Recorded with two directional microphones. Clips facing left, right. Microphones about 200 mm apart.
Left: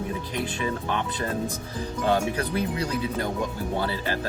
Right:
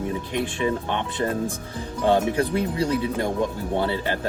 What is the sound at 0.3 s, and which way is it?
Speech, 20° right (ahead or behind).